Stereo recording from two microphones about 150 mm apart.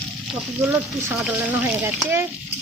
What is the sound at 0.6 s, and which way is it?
Speech, 15° right (ahead or behind).